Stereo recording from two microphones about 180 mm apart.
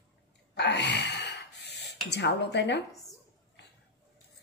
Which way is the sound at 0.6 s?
70° left (ahead or behind).